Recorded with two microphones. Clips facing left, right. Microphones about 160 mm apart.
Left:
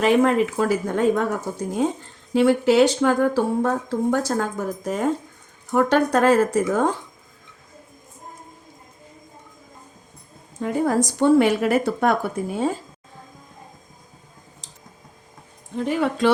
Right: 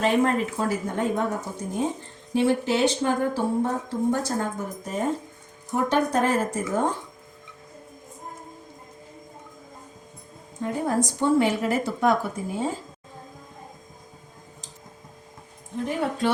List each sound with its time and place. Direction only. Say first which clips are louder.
0.0 s speech: left 4 dB; 90° left
5.7 s speech: left 4 dB; 75° left (ahead or behind); by 6.9 s 90° left
10.6 s speech: left 4 dB; 85° left; by 12.1 s 60° left (ahead or behind)
15.8 s speech: left 5 dB; 90° left